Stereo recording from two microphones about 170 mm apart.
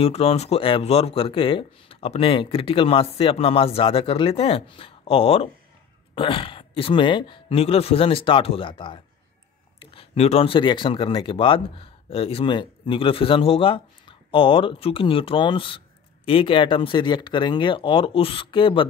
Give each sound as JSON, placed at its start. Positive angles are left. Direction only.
{"t": 0.0, "sound": "speech", "side_deg": 35}